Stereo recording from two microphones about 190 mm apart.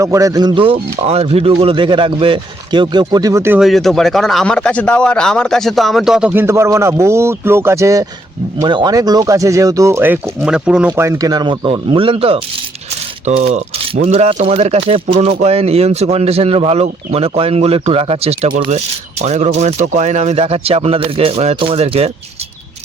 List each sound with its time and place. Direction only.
0.0 s speech: 15° right (ahead or behind)
3.6 s speech: centre (ahead or behind); by 22.1 s 35° right (ahead or behind)